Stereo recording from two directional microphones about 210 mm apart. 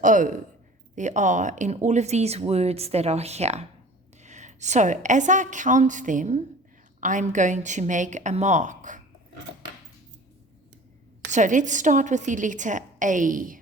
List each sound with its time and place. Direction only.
0.0 s a woman's voice: 40° right (ahead or behind)
11.3 s speech: 35° right (ahead or behind)